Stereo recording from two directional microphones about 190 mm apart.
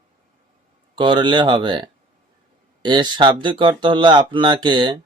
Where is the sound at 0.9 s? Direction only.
25° right (ahead or behind).